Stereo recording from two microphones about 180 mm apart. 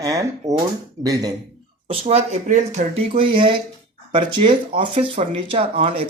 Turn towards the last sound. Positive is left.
turn(degrees=-30)  # may be behind; listen again after turning